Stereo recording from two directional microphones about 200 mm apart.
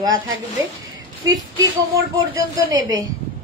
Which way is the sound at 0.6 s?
15° right (ahead or behind).